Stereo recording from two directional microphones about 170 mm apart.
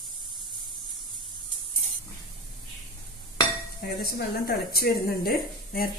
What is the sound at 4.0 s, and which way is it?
A woman's voice, 65° left (ahead or behind).